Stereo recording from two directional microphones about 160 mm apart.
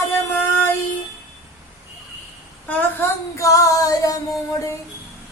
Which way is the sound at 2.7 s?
10° left (ahead or behind).